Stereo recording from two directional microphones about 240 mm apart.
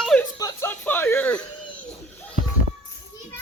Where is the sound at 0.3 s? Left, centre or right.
Centre.